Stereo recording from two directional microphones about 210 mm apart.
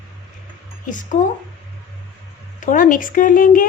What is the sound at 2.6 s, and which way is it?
A woman's voice, 40° left (ahead or behind).